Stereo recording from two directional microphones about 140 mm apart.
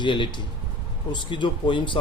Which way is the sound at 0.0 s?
35° left (ahead or behind).